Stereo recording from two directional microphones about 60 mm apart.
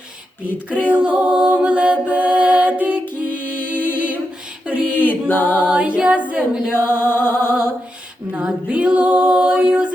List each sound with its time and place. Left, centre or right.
0.8 s music: left
1.0 s a capella: centre
3.2 s music: left
4.7 s a sound: left
5.3 s music: left
5.6 s singing: centre
6.7 s music: left
8.3 s a sound: centre